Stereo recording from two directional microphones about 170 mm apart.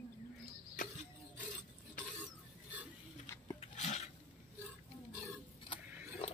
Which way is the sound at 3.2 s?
15° left (ahead or behind).